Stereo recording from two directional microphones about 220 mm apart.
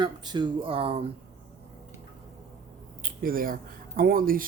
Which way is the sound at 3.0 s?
40° right (ahead or behind).